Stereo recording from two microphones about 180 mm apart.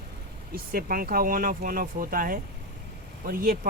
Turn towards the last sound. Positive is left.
turn(degrees=-55)  # may be behind; listen again after turning